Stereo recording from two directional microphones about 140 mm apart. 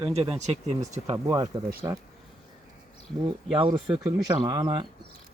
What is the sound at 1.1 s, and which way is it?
Speech, 30° right (ahead or behind).